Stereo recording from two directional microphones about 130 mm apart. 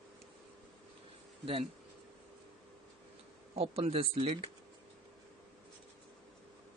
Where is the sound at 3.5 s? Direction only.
50° right (ahead or behind).